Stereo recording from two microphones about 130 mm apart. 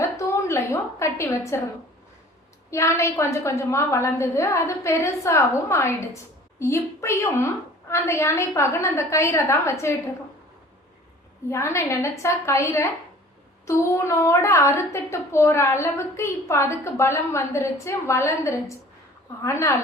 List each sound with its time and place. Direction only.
0.0 s a woman's voice: 20° left (ahead or behind)
2.6 s a woman's voice: 20° left (ahead or behind)
11.4 s a woman's voice: 20° left (ahead or behind)